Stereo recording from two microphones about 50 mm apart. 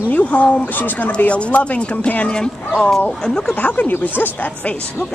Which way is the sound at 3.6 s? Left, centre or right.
Left.